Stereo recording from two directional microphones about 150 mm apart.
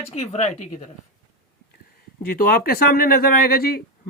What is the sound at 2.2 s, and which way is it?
Speech, 80° left.